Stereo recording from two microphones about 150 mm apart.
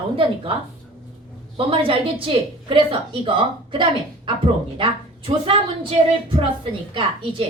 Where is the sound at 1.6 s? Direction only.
35° right (ahead or behind).